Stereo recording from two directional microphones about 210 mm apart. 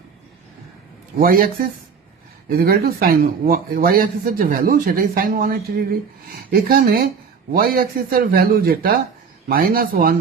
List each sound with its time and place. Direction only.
1.2 s a man's voice: 45° right (ahead or behind)
2.5 s a man's voice: 45° right (ahead or behind)